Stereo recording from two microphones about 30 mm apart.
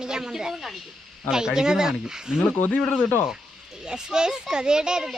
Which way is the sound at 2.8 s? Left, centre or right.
Left.